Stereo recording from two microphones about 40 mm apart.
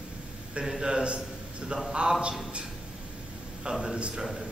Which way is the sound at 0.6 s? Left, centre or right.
Centre.